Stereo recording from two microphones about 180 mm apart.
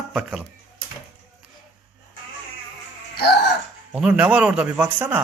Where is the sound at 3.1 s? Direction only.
65° left (ahead or behind).